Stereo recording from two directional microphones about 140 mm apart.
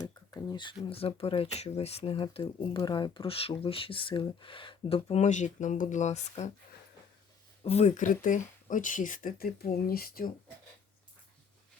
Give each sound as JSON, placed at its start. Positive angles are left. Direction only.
{"t": 0.0, "sound": "speech", "side_deg": 25}
{"t": 7.6, "sound": "speech", "side_deg": 50}